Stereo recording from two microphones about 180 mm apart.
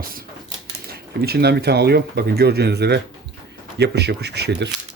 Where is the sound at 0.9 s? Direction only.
60° right (ahead or behind).